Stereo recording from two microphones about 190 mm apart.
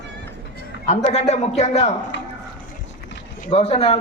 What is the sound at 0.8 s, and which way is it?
A man's voice, 35° left (ahead or behind).